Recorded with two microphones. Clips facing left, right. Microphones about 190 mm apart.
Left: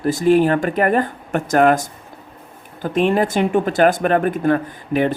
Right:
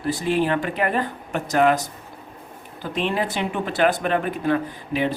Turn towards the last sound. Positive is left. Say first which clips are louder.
# left 5 dB
turn(degrees=50)  # may be behind; listen again after turning